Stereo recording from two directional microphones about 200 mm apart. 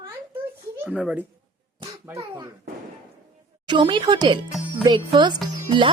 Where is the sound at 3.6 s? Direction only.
25° right (ahead or behind).